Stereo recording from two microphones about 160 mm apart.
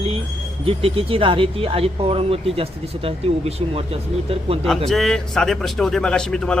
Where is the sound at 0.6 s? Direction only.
35° right (ahead or behind).